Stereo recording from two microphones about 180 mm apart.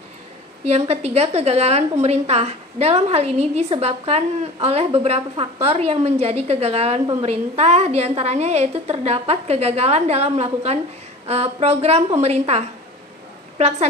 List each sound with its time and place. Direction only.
0.7 s a woman's voice: 35° right (ahead or behind)